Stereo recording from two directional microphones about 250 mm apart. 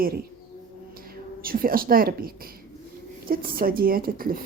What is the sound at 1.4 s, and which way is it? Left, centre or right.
A woman's voice, right.